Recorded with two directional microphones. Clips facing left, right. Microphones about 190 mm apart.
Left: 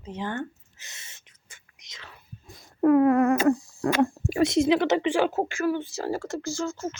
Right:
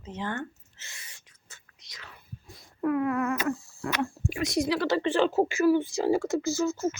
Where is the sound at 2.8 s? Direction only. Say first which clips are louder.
Left 8 dB; 40° left (ahead or behind).